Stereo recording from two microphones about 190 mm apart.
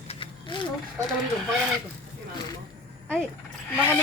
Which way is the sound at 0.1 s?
25° left (ahead or behind).